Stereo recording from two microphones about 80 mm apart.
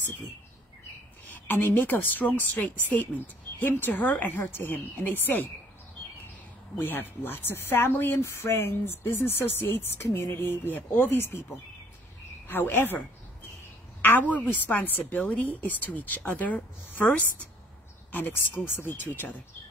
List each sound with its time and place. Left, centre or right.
1.5 s speech: left
6.8 s speech: left
12.4 s speech: left
14.0 s speech: left
18.1 s speech: left